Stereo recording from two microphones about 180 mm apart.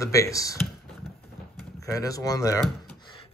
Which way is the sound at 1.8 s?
20° left (ahead or behind).